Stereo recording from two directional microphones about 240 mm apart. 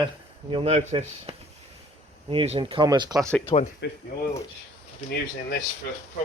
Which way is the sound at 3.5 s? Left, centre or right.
Left.